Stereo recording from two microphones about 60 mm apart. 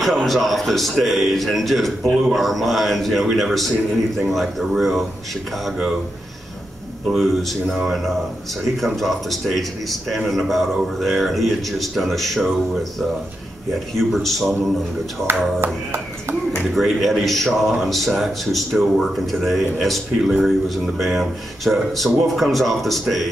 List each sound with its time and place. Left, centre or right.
0.0 s speech: centre
7.1 s speech: centre
13.9 s speech: centre
15.3 s speech: right
16.7 s speech: centre